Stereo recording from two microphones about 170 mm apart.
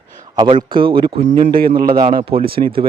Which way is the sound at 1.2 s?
45° right (ahead or behind).